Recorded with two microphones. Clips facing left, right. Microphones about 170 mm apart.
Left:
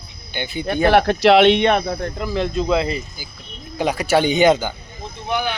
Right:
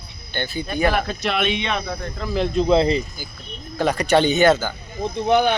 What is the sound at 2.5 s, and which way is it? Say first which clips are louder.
Speech: right 5 dB; 30° right (ahead or behind).